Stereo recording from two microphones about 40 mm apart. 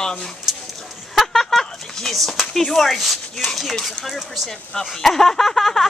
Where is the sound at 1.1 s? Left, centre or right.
Centre.